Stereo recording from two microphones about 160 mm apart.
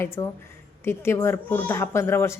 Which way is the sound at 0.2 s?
20° left (ahead or behind).